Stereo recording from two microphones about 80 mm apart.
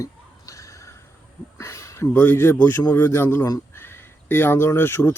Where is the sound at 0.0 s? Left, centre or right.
Left.